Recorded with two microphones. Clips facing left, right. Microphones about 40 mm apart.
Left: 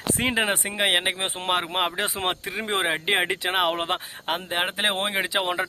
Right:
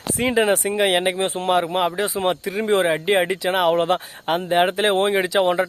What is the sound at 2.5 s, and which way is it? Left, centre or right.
Speech, left.